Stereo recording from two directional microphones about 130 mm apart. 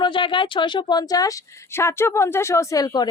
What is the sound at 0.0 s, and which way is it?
A woman's voice, 40° left (ahead or behind).